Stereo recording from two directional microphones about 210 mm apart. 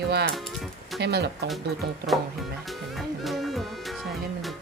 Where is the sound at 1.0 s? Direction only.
50° right (ahead or behind).